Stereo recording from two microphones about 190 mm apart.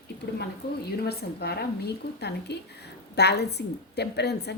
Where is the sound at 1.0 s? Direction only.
55° left (ahead or behind).